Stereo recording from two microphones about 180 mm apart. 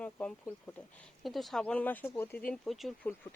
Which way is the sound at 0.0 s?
5° left (ahead or behind).